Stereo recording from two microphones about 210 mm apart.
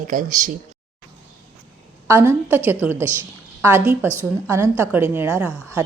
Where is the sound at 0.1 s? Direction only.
40° right (ahead or behind).